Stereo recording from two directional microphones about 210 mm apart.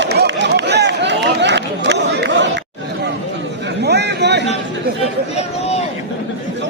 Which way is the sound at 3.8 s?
55° right (ahead or behind).